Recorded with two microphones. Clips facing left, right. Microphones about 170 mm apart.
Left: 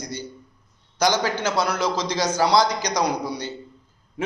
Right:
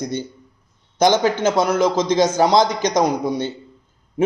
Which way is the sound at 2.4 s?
20° right (ahead or behind).